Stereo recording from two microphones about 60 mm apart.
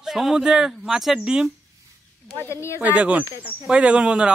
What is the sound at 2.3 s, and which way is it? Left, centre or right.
Speech, left.